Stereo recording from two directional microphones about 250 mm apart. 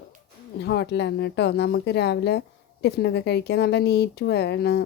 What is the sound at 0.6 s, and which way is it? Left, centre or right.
A woman's voice, left.